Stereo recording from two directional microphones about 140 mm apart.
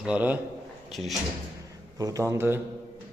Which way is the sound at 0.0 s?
10° right (ahead or behind).